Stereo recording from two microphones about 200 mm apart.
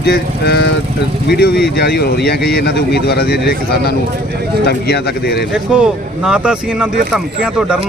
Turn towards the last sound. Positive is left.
turn(degrees=-5)  # may be behind; listen again after turning